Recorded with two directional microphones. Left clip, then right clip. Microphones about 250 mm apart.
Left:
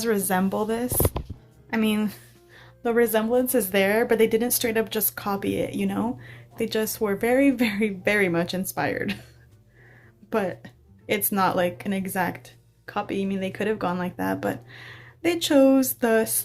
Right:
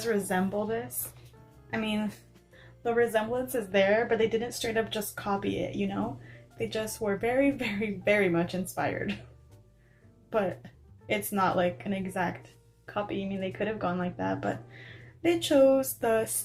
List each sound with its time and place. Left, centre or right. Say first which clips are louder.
0.0 s speech: left 5 dB; left
10.2 s speech: left 3 dB; left